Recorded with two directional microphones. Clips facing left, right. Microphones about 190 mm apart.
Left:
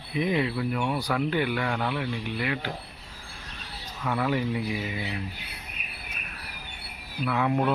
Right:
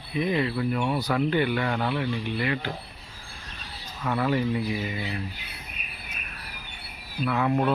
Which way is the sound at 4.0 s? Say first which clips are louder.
Right 1 dB; centre (ahead or behind).